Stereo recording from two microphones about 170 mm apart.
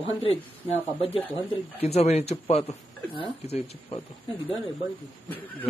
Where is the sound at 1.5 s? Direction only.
40° left (ahead or behind).